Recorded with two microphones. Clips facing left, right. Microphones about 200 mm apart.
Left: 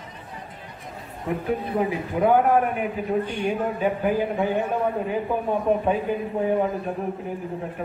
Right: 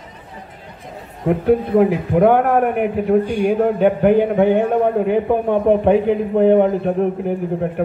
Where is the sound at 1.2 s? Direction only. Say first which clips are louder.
Right 10 dB; 65° right (ahead or behind).